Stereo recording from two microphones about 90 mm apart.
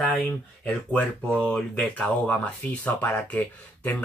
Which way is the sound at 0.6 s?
15° left (ahead or behind).